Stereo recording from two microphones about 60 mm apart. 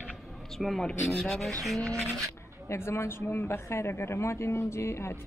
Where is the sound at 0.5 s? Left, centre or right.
Centre.